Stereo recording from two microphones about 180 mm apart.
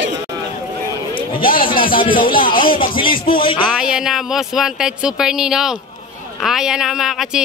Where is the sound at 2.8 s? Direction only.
30° left (ahead or behind).